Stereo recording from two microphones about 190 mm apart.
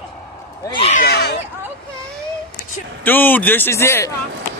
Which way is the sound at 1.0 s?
60° left (ahead or behind).